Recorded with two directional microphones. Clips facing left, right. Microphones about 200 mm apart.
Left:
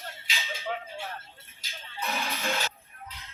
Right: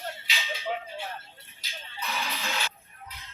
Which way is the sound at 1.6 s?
45° left (ahead or behind).